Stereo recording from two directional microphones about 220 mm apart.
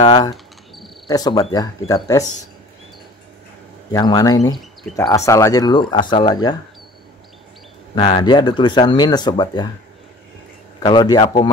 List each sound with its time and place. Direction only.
0.0 s speech: 25° left (ahead or behind)
0.3 s cricket: centre (ahead or behind)
1.0 s speech: 15° left (ahead or behind)
3.9 s speech: 15° left (ahead or behind)
7.9 s speech: 20° left (ahead or behind)
10.8 s speech: 20° left (ahead or behind)